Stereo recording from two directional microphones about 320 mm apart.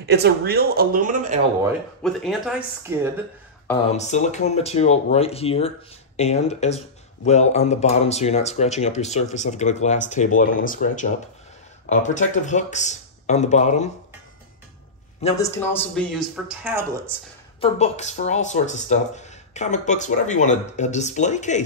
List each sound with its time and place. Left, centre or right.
0.0 s speech: right
2.0 s speech: centre
3.9 s speech: left
15.2 s speech: centre
17.6 s speech: left